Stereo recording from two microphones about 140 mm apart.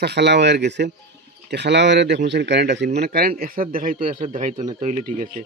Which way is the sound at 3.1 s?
90° right.